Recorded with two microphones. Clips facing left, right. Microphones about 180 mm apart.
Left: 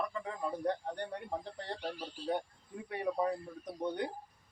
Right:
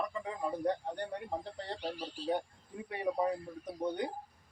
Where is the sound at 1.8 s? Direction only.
15° right (ahead or behind).